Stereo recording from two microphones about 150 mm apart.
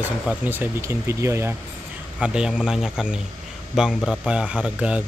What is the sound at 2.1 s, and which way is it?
A man's voice, 5° right (ahead or behind).